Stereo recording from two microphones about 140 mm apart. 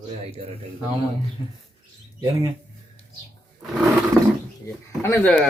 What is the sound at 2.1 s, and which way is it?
Speech, 25° right (ahead or behind).